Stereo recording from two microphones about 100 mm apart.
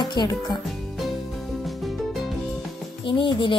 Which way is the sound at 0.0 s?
45° left (ahead or behind).